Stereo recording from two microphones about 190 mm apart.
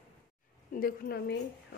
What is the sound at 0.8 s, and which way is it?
Speech, 55° left (ahead or behind).